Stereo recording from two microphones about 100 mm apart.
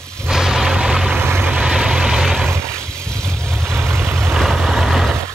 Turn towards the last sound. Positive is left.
turn(degrees=-5)  # may be behind; listen again after turning